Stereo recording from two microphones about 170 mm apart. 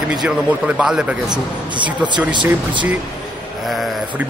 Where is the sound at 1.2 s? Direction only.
25° right (ahead or behind).